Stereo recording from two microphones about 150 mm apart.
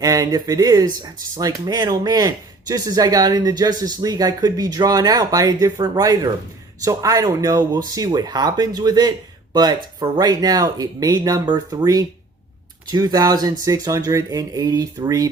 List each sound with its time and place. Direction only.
0.0 s speech: 25° right (ahead or behind)